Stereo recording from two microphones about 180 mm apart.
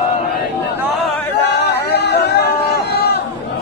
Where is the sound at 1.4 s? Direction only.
65° left (ahead or behind).